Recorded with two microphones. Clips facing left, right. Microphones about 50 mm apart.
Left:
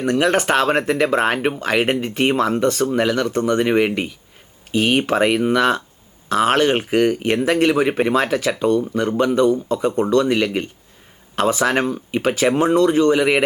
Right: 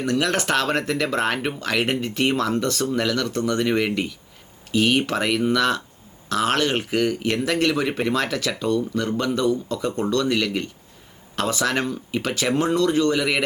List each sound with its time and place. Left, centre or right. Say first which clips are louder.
0.0 s speech: left 5 dB; left